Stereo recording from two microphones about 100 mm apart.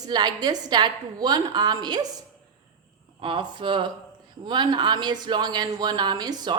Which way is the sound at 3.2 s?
55° right (ahead or behind).